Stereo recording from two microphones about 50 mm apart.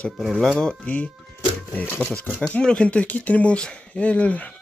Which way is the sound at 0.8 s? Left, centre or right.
Left.